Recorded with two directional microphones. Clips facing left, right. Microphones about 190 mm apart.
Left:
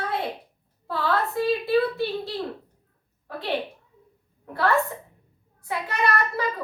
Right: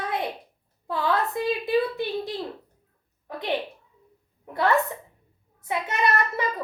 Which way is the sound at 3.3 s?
20° right (ahead or behind).